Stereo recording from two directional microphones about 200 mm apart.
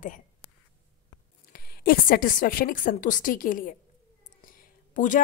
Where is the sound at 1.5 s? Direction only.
50° left (ahead or behind).